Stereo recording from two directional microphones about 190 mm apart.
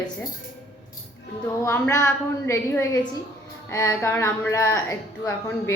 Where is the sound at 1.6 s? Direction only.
15° left (ahead or behind).